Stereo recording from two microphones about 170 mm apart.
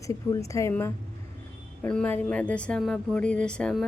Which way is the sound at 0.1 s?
20° left (ahead or behind).